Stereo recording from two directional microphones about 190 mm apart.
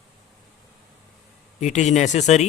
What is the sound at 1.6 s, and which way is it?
Speech, 40° left (ahead or behind).